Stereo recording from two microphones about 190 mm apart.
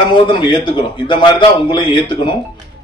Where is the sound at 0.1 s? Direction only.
25° left (ahead or behind).